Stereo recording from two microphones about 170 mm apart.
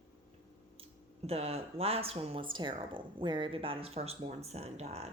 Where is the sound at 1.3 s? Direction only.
35° right (ahead or behind).